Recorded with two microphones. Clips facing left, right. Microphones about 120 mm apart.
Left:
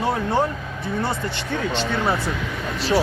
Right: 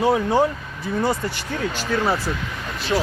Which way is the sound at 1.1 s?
25° left (ahead or behind).